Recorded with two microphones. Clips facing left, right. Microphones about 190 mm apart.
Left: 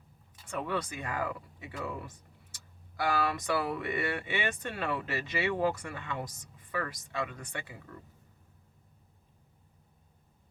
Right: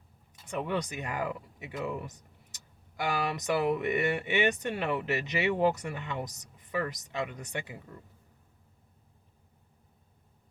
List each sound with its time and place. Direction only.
0.4 s speech: 20° right (ahead or behind)